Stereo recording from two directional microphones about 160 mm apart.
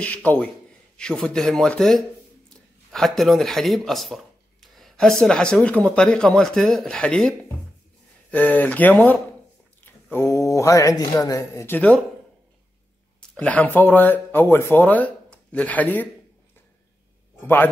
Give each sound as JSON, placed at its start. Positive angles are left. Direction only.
{"t": 0.0, "sound": "speech", "side_deg": 10}
{"t": 13.3, "sound": "speech", "side_deg": 5}